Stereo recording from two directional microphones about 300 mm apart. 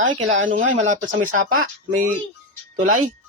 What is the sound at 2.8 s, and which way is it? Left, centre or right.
Speech, right.